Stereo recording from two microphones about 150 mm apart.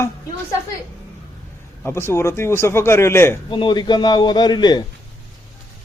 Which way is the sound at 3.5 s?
30° left (ahead or behind).